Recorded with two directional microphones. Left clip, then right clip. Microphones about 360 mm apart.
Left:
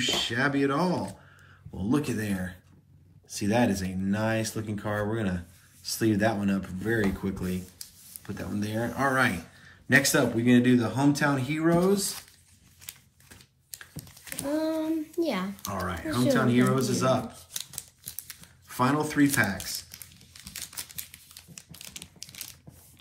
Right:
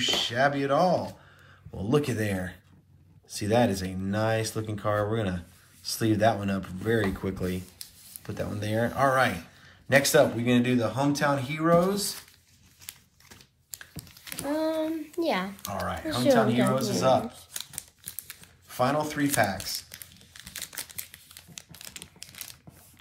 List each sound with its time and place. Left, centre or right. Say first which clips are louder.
0.0 s speech: right 2 dB; centre
13.7 s crumpling: even; centre
14.5 s child singing: even; right
15.6 s speech: right 1 dB; centre
18.2 s a sound: even; centre
21.7 s typing: left 3 dB; centre